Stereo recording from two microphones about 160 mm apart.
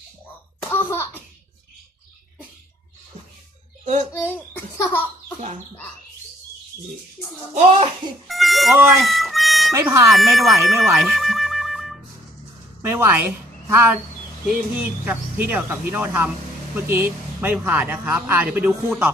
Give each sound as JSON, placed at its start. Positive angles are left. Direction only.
{"t": 0.7, "sound": "a sound", "side_deg": 15}
{"t": 4.1, "sound": "a child's voice", "side_deg": 10}
{"t": 7.5, "sound": "a child's voice", "side_deg": -40}
{"t": 8.3, "sound": "cat", "side_deg": 0}
{"t": 9.0, "sound": "harmonica", "side_deg": 0}
{"t": 9.7, "sound": "speech", "side_deg": -15}
{"t": 10.1, "sound": "speech", "side_deg": 0}
{"t": 12.8, "sound": "a woman's voice", "side_deg": -15}